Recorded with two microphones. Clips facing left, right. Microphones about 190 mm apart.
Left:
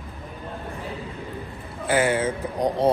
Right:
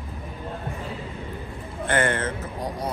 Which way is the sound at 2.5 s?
25° left (ahead or behind).